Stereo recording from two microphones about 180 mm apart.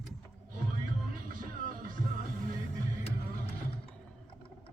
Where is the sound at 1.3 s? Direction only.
50° right (ahead or behind).